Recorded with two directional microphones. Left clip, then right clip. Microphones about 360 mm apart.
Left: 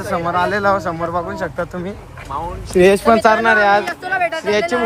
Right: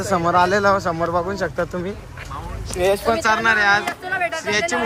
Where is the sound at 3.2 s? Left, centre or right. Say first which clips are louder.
Left 1 dB; centre.